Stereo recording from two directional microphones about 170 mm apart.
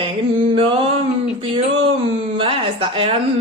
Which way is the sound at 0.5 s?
35° right (ahead or behind).